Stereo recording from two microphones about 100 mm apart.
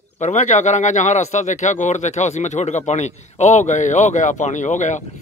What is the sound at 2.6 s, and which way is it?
Speech, 90° left.